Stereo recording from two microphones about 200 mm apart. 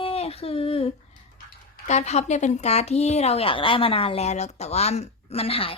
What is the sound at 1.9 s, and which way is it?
Speech, 35° left (ahead or behind).